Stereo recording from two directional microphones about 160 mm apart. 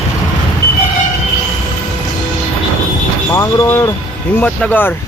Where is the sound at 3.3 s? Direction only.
20° left (ahead or behind).